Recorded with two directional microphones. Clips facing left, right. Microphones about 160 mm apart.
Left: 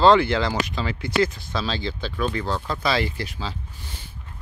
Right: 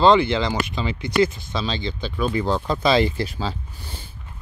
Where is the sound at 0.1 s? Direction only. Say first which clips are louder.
Right 1 dB; 5° left (ahead or behind).